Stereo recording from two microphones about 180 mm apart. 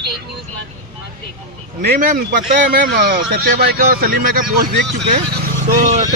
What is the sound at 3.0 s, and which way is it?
Speech, 65° right (ahead or behind).